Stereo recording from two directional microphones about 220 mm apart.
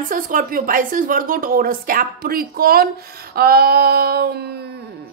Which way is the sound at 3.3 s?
45° right (ahead or behind).